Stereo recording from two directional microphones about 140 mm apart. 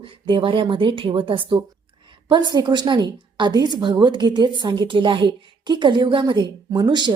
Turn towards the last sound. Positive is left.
turn(degrees=-30)  # may be behind; listen again after turning